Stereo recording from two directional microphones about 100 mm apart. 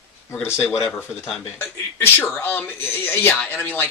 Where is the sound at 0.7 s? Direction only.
Centre (ahead or behind).